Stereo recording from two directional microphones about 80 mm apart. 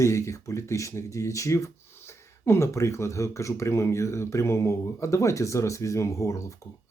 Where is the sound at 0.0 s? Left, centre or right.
Left.